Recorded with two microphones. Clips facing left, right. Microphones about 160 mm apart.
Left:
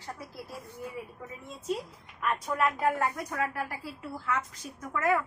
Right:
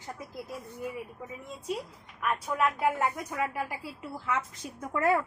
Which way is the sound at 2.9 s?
15° right (ahead or behind).